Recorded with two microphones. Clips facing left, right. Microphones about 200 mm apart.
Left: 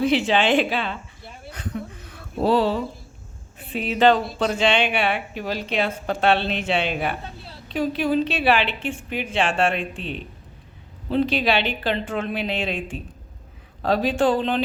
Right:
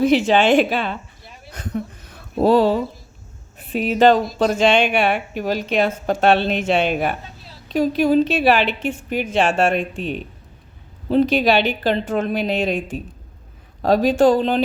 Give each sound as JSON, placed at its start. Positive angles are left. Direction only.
{"t": 0.0, "sound": "a woman's voice", "side_deg": -45}
{"t": 2.4, "sound": "a woman's voice", "side_deg": -45}